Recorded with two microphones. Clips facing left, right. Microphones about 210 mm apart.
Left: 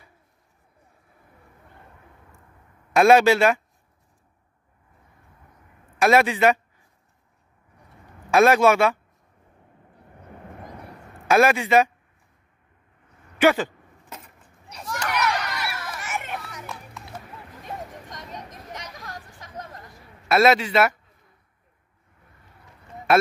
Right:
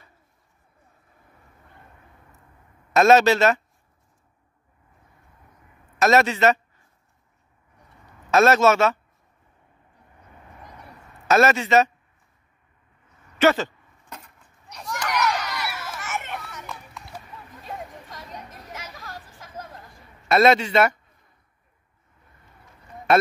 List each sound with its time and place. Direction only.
2.9 s speech: 10° left (ahead or behind)
5.9 s speech: 10° left (ahead or behind)
8.3 s speech: 10° left (ahead or behind)
10.2 s vehicle: 50° left (ahead or behind)
11.2 s speech: 10° left (ahead or behind)
13.4 s a sound: 15° left (ahead or behind)
18.1 s chatter: 5° right (ahead or behind)
20.2 s speech: 5° left (ahead or behind)
23.1 s speech: 5° left (ahead or behind)